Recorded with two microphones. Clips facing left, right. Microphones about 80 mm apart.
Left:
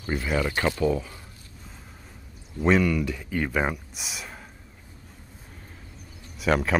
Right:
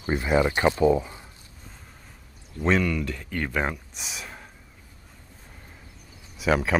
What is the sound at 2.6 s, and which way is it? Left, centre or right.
Speech, centre.